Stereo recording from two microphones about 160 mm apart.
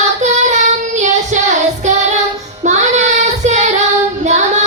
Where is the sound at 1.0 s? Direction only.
45° right (ahead or behind).